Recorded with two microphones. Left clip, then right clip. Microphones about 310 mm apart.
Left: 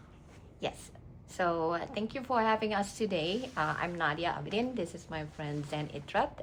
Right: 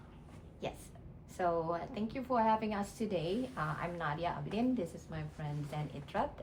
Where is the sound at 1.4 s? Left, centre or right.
Left.